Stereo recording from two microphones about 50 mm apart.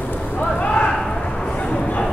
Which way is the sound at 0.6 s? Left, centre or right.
Left.